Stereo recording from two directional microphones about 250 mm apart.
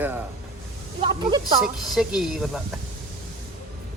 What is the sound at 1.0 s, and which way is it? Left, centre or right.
Speech, centre.